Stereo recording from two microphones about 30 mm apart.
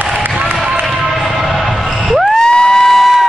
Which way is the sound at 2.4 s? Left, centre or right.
Left.